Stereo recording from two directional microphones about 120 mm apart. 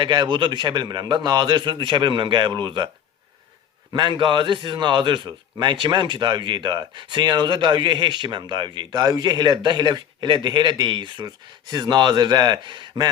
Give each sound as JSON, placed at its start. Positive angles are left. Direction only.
{"t": 0.0, "sound": "a man's voice", "side_deg": -40}
{"t": 3.9, "sound": "a man's voice", "side_deg": -40}